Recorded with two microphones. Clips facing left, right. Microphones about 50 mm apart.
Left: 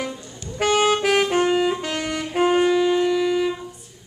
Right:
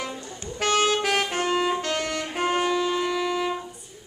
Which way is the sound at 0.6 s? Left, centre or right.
Centre.